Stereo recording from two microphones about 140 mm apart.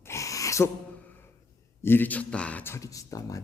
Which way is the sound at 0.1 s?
20° left (ahead or behind).